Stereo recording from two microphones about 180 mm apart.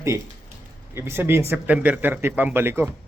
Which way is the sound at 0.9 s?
15° right (ahead or behind).